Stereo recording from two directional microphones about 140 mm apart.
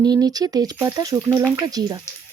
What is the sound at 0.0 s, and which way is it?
Speech, 25° right (ahead or behind).